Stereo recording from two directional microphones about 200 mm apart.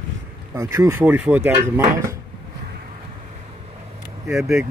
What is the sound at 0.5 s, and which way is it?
Speech, 15° right (ahead or behind).